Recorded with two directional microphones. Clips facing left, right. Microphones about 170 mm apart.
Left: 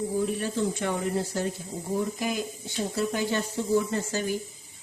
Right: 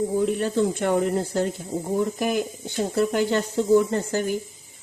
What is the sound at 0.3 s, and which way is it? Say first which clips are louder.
Speech: right 6 dB; 60° right (ahead or behind).